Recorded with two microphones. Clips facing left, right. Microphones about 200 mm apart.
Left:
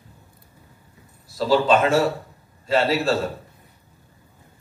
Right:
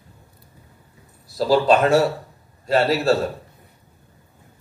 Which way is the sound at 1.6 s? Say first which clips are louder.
Right 3 dB; 40° right (ahead or behind).